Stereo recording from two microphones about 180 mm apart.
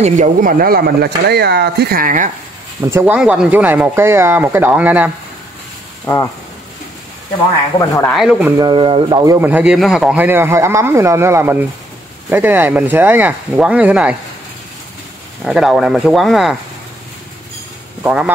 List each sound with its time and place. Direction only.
0.0 s speech: 45° right (ahead or behind)
2.8 s a man's voice: 15° right (ahead or behind)
6.1 s speech: 15° left (ahead or behind)
8.1 s speech: 5° right (ahead or behind)
8.5 s a man's voice: 25° right (ahead or behind); by 14.1 s 10° right (ahead or behind)
15.4 s speech: centre (ahead or behind)
18.0 s a man's voice: 5° right (ahead or behind)